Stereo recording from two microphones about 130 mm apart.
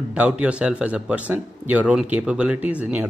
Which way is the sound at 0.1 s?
10° right (ahead or behind).